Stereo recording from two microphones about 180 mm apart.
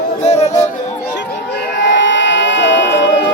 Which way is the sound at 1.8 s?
90° left.